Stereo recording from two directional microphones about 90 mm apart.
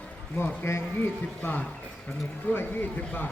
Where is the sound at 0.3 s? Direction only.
25° left (ahead or behind).